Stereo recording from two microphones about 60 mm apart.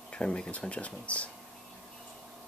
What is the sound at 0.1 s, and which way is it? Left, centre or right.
Speech, centre.